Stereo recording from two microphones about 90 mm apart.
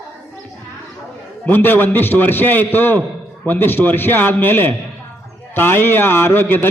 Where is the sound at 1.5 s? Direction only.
20° left (ahead or behind).